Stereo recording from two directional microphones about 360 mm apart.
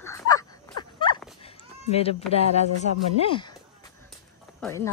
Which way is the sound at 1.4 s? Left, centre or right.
Centre.